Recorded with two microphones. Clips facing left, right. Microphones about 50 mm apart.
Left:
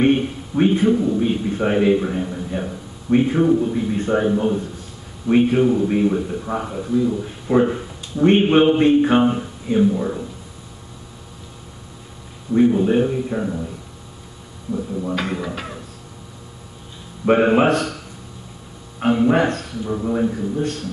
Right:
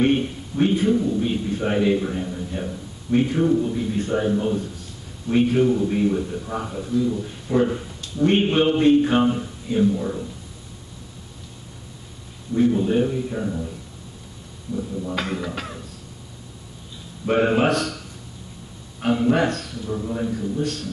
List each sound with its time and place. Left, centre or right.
0.0 s speech: centre
12.5 s speech: centre
15.1 s speech: centre
17.3 s a man's voice: centre